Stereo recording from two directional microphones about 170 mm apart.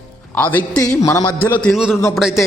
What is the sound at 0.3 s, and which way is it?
A man's voice, 10° left (ahead or behind).